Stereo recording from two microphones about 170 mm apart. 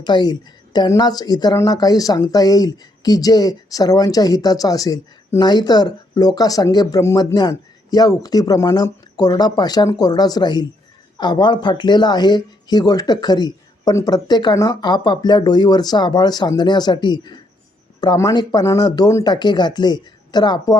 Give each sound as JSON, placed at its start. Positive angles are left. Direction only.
{"t": 0.0, "sound": "a woman's voice", "side_deg": 25}